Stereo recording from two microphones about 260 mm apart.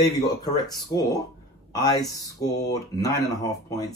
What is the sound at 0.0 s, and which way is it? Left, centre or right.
Speech, centre.